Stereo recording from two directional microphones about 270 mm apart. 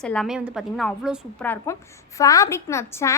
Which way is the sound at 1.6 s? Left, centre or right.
Centre.